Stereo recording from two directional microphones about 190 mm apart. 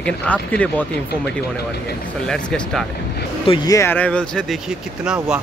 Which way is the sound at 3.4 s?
25° left (ahead or behind).